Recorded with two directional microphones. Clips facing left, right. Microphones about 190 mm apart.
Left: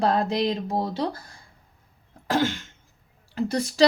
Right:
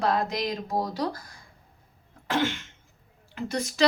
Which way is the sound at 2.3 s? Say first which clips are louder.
Left 3 dB; 35° left (ahead or behind).